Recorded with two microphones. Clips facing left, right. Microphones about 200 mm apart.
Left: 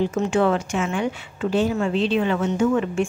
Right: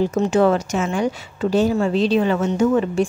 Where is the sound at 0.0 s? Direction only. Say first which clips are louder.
Right 3 dB; 40° right (ahead or behind).